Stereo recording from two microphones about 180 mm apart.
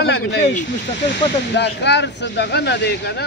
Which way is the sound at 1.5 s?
75° left (ahead or behind).